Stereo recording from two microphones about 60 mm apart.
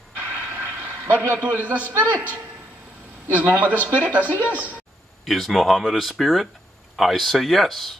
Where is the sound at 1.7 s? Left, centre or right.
Right.